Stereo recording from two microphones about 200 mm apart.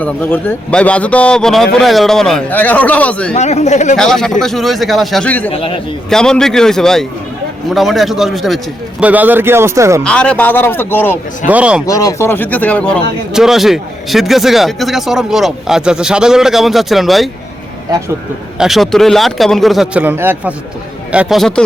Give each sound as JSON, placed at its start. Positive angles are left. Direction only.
{"t": 0.0, "sound": "speech", "side_deg": 10}
{"t": 3.3, "sound": "speech", "side_deg": 35}
{"t": 3.9, "sound": "speech", "side_deg": 5}
{"t": 5.5, "sound": "a man's voice", "side_deg": 25}
{"t": 6.1, "sound": "speech", "side_deg": 5}
{"t": 10.0, "sound": "speech", "side_deg": 5}
{"t": 11.4, "sound": "speech", "side_deg": -5}
{"t": 11.9, "sound": "speech", "side_deg": 15}
{"t": 18.6, "sound": "speech", "side_deg": 0}